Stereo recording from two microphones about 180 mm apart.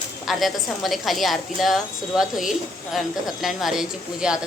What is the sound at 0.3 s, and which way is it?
A woman's voice, centre (ahead or behind).